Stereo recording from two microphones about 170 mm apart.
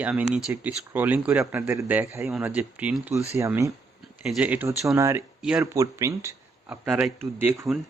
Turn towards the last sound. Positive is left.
turn(degrees=-10)  # may be behind; listen again after turning